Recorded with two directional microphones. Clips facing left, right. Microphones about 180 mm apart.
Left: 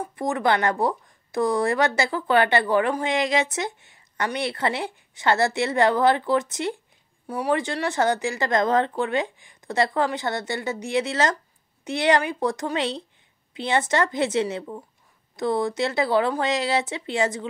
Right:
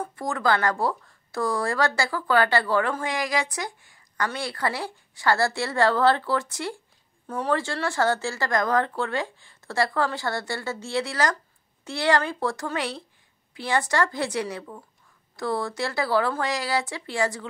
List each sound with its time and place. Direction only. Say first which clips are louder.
0.1 s speech: left 3 dB; 20° left (ahead or behind)